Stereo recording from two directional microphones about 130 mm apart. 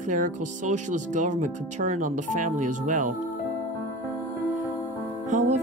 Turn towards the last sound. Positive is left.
turn(degrees=-65)  # may be behind; listen again after turning